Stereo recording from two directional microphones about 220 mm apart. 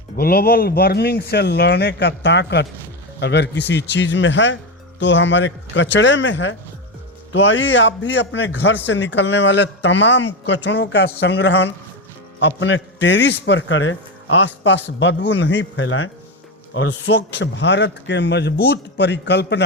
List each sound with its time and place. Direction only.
0.2 s a man's voice: 45° left (ahead or behind)